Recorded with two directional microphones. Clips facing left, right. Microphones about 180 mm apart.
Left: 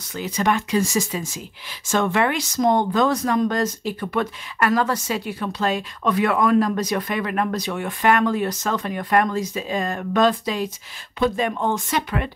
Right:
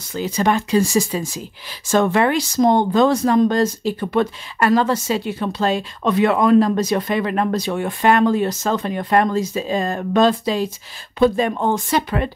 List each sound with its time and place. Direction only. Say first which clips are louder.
0.1 s speech: right 3 dB; 30° right (ahead or behind)